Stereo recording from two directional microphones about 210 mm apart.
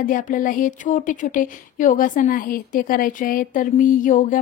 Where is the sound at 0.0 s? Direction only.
40° left (ahead or behind).